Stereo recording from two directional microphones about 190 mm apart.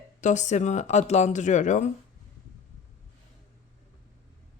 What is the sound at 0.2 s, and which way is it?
Speech, 40° left (ahead or behind).